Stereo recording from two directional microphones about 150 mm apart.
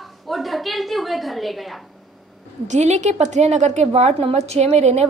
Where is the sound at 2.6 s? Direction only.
50° right (ahead or behind).